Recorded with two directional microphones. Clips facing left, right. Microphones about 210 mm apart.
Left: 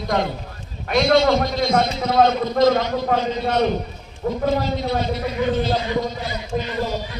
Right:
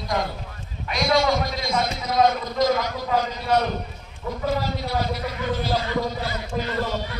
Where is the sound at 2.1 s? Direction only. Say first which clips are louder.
Left 2 dB; 25° left (ahead or behind).